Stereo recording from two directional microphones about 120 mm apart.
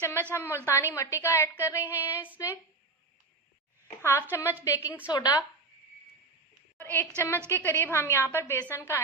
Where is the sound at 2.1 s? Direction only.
15° right (ahead or behind).